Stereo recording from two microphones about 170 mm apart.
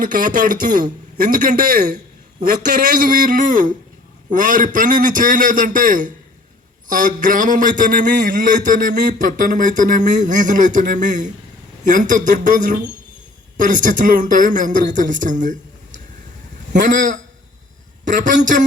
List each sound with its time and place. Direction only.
0.0 s a man's voice: 55° right (ahead or behind)
16.7 s a man's voice: 50° right (ahead or behind)